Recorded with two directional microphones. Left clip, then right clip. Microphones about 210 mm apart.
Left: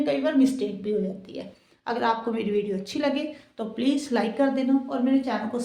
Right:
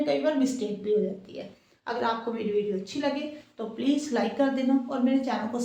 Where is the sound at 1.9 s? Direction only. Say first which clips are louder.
Left 3 dB; 45° left (ahead or behind).